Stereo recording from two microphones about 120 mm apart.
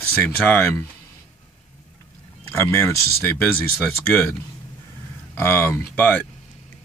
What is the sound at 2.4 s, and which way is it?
Speech, 20° left (ahead or behind).